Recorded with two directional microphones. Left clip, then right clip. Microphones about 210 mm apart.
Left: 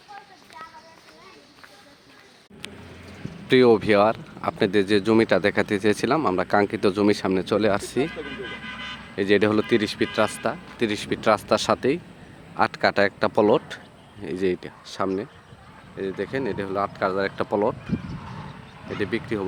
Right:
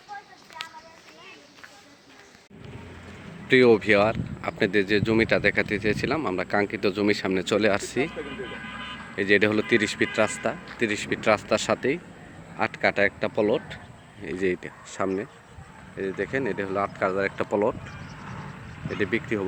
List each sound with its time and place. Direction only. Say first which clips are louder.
3.5 s speech: left 1 dB; 15° left (ahead or behind)
8.1 s speech: left 1 dB; 35° left (ahead or behind)
9.1 s speech: left 1 dB; 15° left (ahead or behind)
10.8 s speech: left 1 dB; 15° left (ahead or behind)
14.3 s speech: left 2 dB; 15° left (ahead or behind)
18.9 s speech: even; 10° left (ahead or behind)